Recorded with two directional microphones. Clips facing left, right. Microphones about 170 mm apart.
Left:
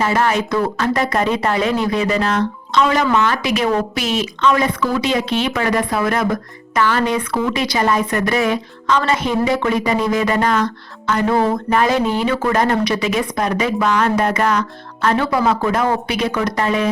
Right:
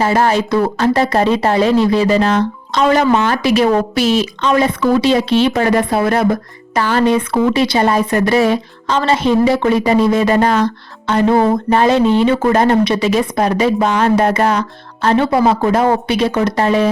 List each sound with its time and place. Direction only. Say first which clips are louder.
0.0 s speech: right 4 dB; 35° right (ahead or behind)